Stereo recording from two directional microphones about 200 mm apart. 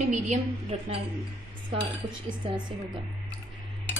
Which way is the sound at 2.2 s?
25° right (ahead or behind).